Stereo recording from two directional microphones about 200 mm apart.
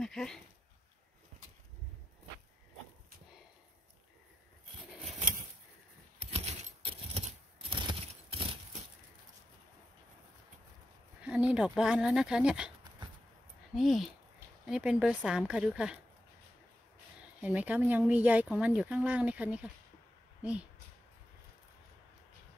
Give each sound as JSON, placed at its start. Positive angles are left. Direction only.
{"t": 0.0, "sound": "speech", "side_deg": 5}
{"t": 6.1, "sound": "a sound", "side_deg": -30}
{"t": 11.1, "sound": "speech", "side_deg": -5}
{"t": 13.7, "sound": "speech", "side_deg": 0}
{"t": 17.4, "sound": "speech", "side_deg": -10}